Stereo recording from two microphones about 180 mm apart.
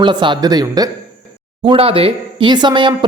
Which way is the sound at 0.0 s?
25° right (ahead or behind).